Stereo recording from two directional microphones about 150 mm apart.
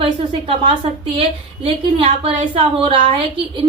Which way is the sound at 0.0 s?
35° right (ahead or behind).